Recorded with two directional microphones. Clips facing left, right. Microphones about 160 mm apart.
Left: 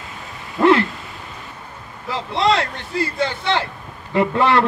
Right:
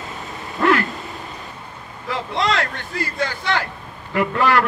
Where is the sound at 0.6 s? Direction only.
25° left (ahead or behind).